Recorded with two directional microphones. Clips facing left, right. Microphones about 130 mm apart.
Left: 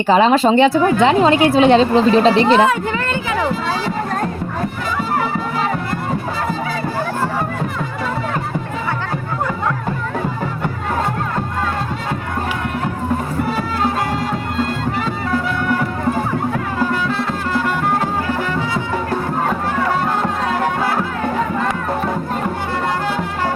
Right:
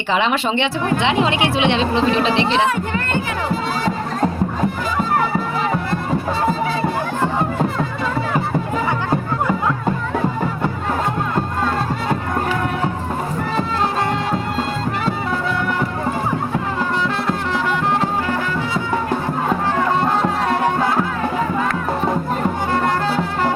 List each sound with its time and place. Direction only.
0.1 s a woman's voice: 40° left (ahead or behind)